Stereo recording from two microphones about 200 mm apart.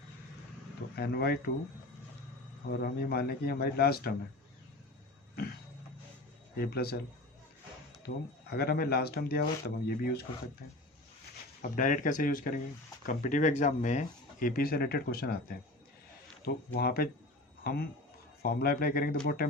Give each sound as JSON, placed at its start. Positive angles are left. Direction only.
{"t": 0.9, "sound": "speech", "side_deg": 50}
{"t": 2.8, "sound": "speech", "side_deg": 50}
{"t": 6.6, "sound": "speech", "side_deg": 50}
{"t": 8.0, "sound": "speech", "side_deg": 50}
{"t": 11.6, "sound": "speech", "side_deg": 40}